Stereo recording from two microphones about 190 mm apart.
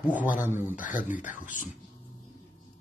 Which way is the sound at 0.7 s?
45° left (ahead or behind).